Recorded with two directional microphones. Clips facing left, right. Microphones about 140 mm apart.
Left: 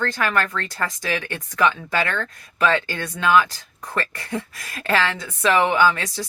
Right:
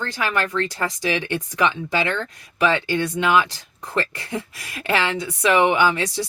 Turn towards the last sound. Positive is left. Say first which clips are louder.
# even
turn(degrees=-20)  # may be behind; listen again after turning